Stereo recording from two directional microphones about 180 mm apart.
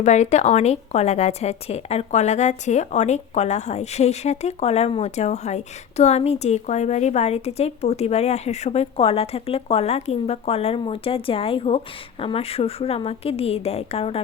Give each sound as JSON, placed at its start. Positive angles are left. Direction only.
{"t": 0.0, "sound": "a woman's voice", "side_deg": 40}